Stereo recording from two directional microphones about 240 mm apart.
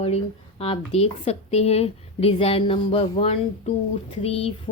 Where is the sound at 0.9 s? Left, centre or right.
Left.